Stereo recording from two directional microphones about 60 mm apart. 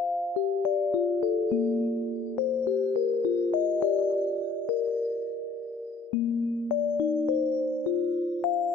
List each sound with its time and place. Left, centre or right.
1.6 s music: left
3.6 s music: left
7.1 s music: left